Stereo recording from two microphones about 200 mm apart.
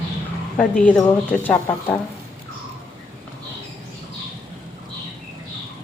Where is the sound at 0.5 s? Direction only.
5° left (ahead or behind).